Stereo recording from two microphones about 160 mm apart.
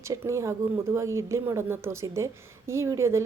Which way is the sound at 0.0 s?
20° right (ahead or behind).